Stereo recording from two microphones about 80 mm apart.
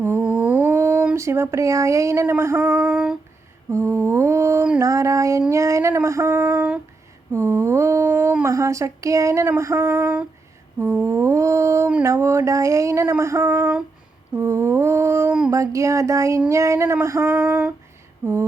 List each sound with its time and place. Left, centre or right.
0.2 s humming: centre
1.1 s female singing: right
2.8 s a sound: centre
3.7 s female singing: right
4.8 s a sound: right
5.5 s female singing: right
7.3 s mantra: right
8.4 s female singing: right
15.4 s a sound: right
16.5 s female singing: right